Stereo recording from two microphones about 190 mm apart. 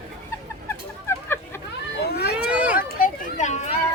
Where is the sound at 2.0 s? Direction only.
60° left (ahead or behind).